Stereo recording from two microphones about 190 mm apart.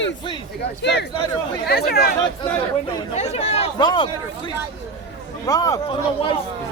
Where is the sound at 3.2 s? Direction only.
35° left (ahead or behind).